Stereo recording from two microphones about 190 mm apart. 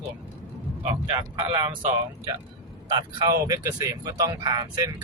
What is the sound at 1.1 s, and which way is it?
Speech, 25° right (ahead or behind).